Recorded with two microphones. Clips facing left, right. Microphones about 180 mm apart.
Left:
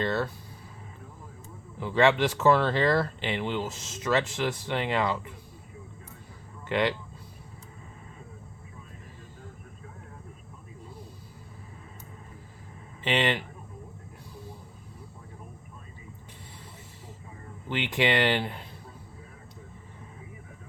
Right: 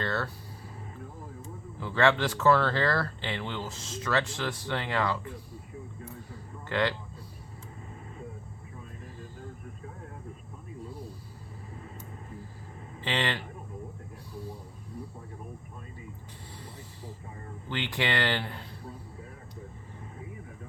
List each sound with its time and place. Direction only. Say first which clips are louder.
0.0 s speech: left 4 dB; 20° left (ahead or behind)
1.8 s speech: left 3 dB; 20° left (ahead or behind)
6.7 s speech: left 2 dB; 20° left (ahead or behind)
13.1 s speech: left 4 dB; 20° left (ahead or behind)
17.7 s speech: left 4 dB; 20° left (ahead or behind)